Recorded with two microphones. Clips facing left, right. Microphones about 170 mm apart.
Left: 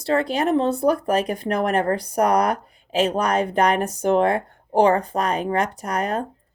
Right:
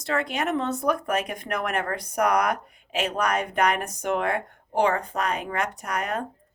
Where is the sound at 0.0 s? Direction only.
30° left (ahead or behind).